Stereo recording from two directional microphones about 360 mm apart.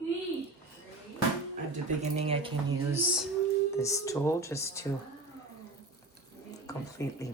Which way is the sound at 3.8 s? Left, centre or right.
Centre.